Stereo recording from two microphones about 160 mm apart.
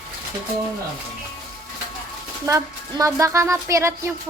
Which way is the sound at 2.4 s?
20° right (ahead or behind).